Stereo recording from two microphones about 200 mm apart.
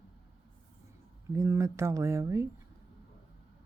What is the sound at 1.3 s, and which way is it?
Speech, 15° right (ahead or behind).